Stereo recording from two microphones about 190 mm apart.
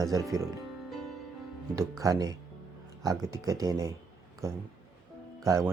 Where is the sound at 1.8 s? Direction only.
15° right (ahead or behind).